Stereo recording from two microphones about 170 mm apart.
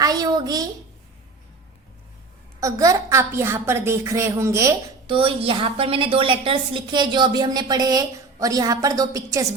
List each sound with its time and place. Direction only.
0.0 s a sound: 20° right (ahead or behind)
2.6 s a woman's voice: 20° right (ahead or behind)
5.0 s a woman's voice: 30° right (ahead or behind)